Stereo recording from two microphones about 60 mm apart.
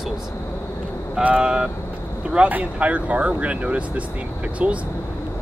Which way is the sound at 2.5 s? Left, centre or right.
Right.